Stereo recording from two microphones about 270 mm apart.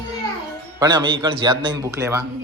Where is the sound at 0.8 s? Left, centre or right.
Centre.